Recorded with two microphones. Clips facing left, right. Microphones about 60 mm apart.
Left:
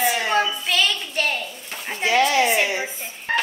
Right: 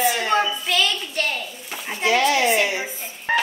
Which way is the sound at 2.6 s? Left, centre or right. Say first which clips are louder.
Even; left.